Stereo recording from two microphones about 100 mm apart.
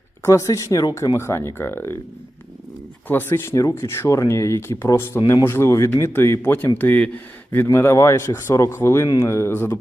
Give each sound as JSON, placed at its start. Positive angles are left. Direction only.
{"t": 0.3, "sound": "speech", "side_deg": 30}
{"t": 3.1, "sound": "speech", "side_deg": 20}